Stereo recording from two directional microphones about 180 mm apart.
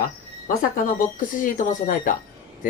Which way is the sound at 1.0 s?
45° left (ahead or behind).